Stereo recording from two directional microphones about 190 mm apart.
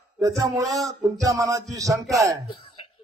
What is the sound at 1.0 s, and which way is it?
Music, 15° right (ahead or behind).